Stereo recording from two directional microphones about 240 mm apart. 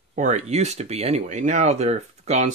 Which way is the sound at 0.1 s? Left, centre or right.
Right.